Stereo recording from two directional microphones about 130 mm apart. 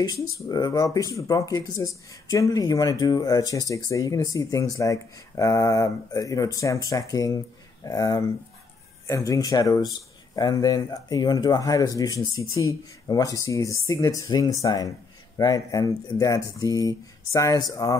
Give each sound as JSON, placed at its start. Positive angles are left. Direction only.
{"t": 0.0, "sound": "speech", "side_deg": 30}